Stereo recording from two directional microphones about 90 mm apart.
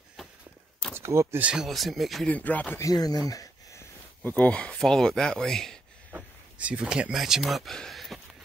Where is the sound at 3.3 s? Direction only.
40° left (ahead or behind).